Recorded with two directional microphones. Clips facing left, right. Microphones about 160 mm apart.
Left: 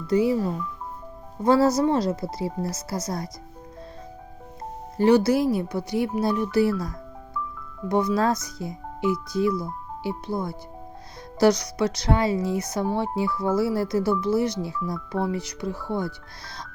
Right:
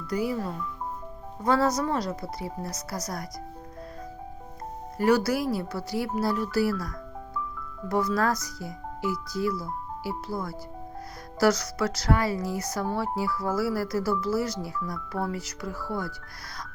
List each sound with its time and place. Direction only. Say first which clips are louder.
0.1 s speech: left 7 dB; 25° left (ahead or behind)
1.5 s speech: left 5 dB; 30° left (ahead or behind)
4.9 s speech: left 5 dB; 25° left (ahead or behind)